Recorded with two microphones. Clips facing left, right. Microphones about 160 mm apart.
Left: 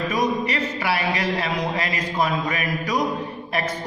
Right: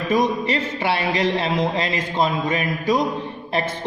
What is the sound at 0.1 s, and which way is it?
Speech, 30° right (ahead or behind).